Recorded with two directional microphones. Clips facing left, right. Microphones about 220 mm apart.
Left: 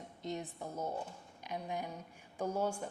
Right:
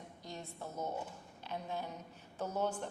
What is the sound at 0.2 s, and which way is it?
A woman's voice, 20° left (ahead or behind).